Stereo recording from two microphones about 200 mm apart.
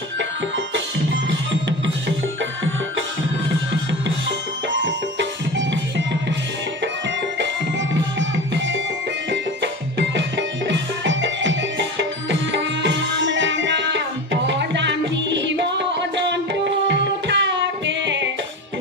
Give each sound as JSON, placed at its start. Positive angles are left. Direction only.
{"t": 5.6, "sound": "music", "side_deg": -65}
{"t": 9.3, "sound": "music", "side_deg": -60}